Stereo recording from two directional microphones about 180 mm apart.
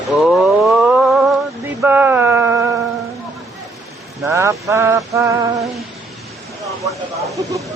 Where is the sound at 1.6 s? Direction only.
15° right (ahead or behind).